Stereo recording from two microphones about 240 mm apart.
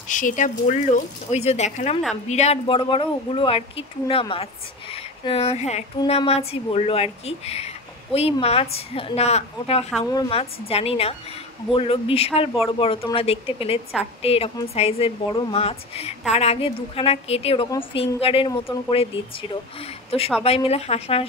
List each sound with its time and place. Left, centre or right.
0.1 s speech: left